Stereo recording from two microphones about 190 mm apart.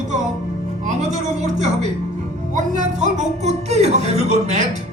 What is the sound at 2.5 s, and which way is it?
Speech, 40° right (ahead or behind).